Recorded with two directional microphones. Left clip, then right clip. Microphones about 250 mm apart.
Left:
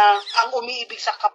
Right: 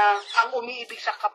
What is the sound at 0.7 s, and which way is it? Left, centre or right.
Speech, centre.